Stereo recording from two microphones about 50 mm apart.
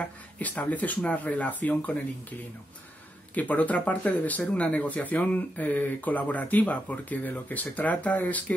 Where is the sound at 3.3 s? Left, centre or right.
Left.